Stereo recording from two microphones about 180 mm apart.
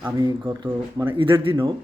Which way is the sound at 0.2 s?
25° right (ahead or behind).